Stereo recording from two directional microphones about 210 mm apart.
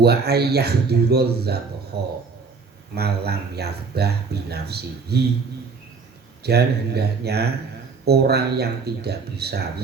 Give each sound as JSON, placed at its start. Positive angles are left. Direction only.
{"t": 0.0, "sound": "speech", "side_deg": -50}
{"t": 2.9, "sound": "speech", "side_deg": -50}
{"t": 6.4, "sound": "speech", "side_deg": -50}